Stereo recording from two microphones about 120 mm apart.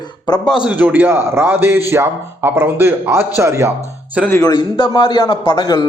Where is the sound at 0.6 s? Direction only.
15° right (ahead or behind).